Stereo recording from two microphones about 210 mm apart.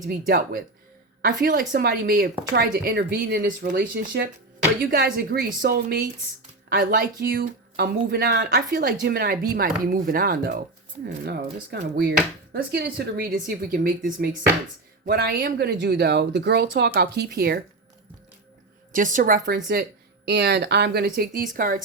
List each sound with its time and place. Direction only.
0.1 s speech: 45° right (ahead or behind)
4.9 s speech: 45° right (ahead or behind)
18.9 s speech: 40° right (ahead or behind)
20.2 s speech: 55° right (ahead or behind)